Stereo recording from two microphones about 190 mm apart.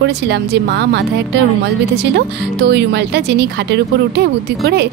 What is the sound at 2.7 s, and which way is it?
Speech, 65° right (ahead or behind).